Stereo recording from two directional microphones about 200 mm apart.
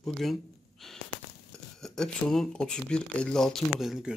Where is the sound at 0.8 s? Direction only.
Centre (ahead or behind).